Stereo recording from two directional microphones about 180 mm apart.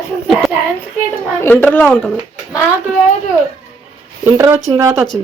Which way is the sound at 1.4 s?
10° left (ahead or behind).